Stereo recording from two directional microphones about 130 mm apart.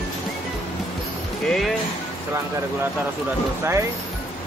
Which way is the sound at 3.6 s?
20° right (ahead or behind).